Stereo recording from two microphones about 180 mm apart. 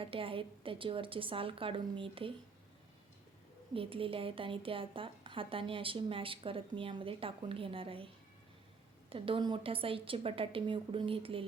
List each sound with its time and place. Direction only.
0.0 s a woman's voice: 30° right (ahead or behind)
3.8 s a woman's voice: 30° right (ahead or behind)